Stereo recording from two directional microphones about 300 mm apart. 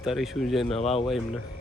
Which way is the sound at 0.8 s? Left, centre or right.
Centre.